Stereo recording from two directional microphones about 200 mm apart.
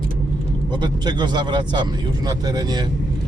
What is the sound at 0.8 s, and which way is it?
Speech, 20° right (ahead or behind).